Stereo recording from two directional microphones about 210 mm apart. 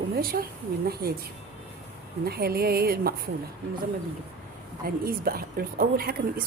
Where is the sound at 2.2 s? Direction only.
45° right (ahead or behind).